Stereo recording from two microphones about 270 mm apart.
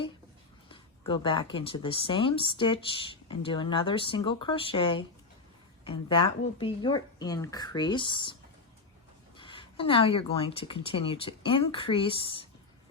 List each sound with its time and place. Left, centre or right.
0.7 s speech: centre
9.4 s speech: centre